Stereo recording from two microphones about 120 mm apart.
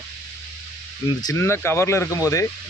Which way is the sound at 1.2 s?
25° left (ahead or behind).